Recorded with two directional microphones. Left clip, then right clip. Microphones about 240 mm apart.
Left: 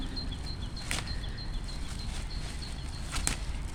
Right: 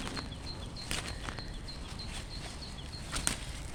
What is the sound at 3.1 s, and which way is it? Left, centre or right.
Bird flight, centre.